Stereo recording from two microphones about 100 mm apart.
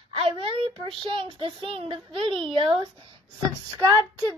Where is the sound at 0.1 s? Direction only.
55° right (ahead or behind).